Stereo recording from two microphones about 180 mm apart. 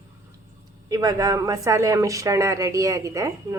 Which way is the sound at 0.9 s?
20° right (ahead or behind).